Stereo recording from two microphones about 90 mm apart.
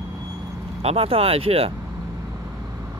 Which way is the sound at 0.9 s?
90° right.